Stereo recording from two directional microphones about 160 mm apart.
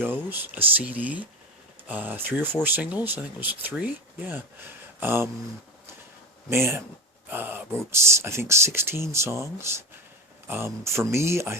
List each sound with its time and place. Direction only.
0.0 s speech: 10° right (ahead or behind)
6.5 s speech: 15° right (ahead or behind)